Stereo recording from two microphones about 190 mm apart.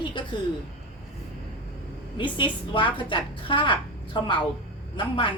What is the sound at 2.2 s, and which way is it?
A woman's voice, 25° left (ahead or behind).